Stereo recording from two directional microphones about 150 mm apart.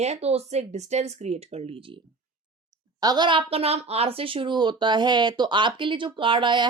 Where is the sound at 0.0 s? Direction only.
45° right (ahead or behind).